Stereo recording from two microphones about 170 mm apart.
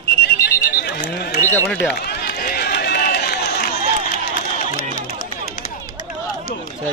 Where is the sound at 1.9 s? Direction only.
70° left (ahead or behind).